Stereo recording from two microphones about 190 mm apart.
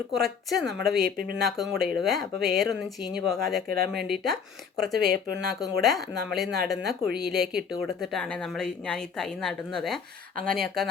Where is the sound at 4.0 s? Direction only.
Centre (ahead or behind).